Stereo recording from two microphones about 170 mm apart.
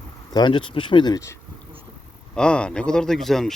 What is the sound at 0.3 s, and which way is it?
Speech, 25° left (ahead or behind).